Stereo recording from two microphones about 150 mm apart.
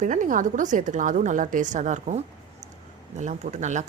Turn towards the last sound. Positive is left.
turn(degrees=-55)  # may be behind; listen again after turning